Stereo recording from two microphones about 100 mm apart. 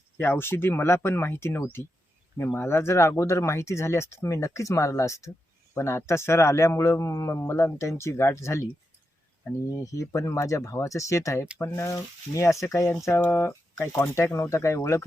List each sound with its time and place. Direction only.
0.2 s speech: 20° left (ahead or behind)
9.6 s speech: 35° left (ahead or behind)